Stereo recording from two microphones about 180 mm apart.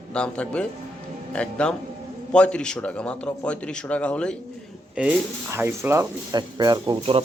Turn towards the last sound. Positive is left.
turn(degrees=-25)  # may be behind; listen again after turning